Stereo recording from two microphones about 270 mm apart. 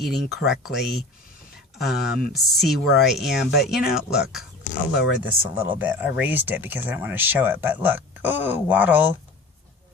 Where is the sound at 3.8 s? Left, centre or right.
Left.